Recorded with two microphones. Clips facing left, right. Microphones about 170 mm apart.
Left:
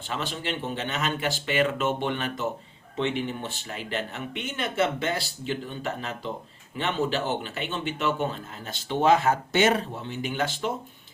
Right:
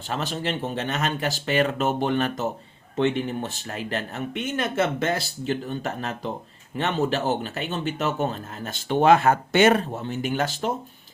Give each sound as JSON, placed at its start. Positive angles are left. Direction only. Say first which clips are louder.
{"t": 0.1, "sound": "speech", "louder": "right 3 dB", "side_deg": -40}